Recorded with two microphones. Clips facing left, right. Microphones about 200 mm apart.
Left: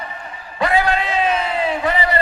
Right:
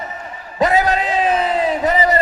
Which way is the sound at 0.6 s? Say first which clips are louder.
Right 2 dB; 40° right (ahead or behind).